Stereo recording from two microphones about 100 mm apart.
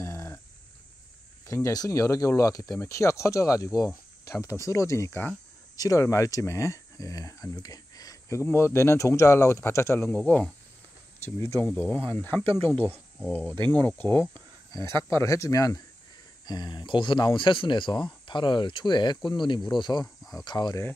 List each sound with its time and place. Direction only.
0.0 s a sound: 30° left (ahead or behind)
1.5 s speech: 35° left (ahead or behind); by 10.5 s 15° left (ahead or behind)
11.2 s speech: 25° left (ahead or behind)
11.7 s speech: 15° left (ahead or behind)
13.6 s speech: 45° right (ahead or behind)
13.8 s speech: 15° left (ahead or behind)
14.7 s speech: 35° left (ahead or behind)
16.4 s speech: 45° left (ahead or behind)